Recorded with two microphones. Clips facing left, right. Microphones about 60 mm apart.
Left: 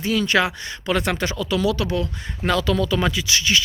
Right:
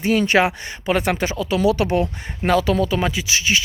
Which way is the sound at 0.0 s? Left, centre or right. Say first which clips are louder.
Right 3 dB; right.